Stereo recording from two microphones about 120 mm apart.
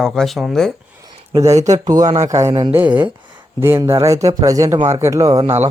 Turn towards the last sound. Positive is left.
turn(degrees=-30)  # may be behind; listen again after turning